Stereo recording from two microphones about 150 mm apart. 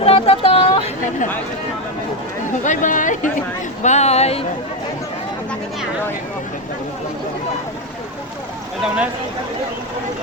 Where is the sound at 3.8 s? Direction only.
50° left (ahead or behind).